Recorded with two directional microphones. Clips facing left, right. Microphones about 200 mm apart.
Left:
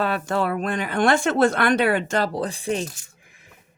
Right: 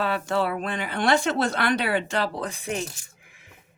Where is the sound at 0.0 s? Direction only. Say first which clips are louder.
Left 2 dB; 45° left (ahead or behind); by 2.8 s 30° left (ahead or behind).